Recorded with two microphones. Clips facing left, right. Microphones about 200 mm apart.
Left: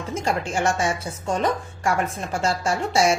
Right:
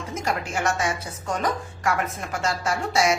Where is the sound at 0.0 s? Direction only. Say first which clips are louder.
Left 3 dB; 25° left (ahead or behind).